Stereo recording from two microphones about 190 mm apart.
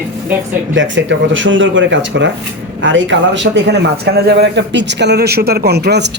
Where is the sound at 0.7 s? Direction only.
75° right (ahead or behind).